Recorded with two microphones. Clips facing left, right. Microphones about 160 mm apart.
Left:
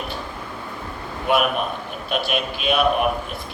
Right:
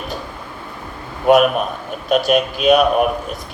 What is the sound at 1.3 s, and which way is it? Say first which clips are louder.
Speech: right 8 dB; 45° right (ahead or behind).